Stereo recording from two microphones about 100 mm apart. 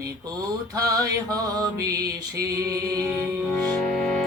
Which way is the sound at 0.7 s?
35° right (ahead or behind).